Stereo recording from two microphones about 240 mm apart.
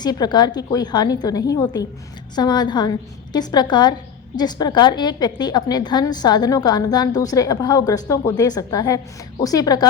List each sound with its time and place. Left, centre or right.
0.0 s a woman's voice: centre